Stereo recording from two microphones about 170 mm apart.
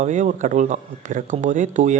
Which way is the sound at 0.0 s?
45° right (ahead or behind).